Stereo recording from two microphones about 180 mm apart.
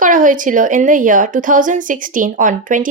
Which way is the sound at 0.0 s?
45° right (ahead or behind).